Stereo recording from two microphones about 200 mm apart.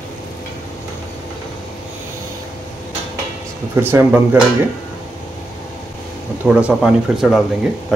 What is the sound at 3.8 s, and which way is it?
Speech, 10° right (ahead or behind).